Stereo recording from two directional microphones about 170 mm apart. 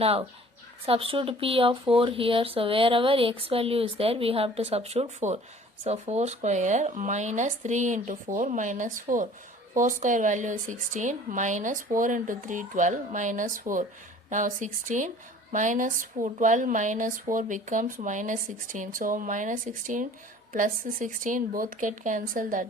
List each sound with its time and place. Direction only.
0.0 s speech: 35° right (ahead or behind)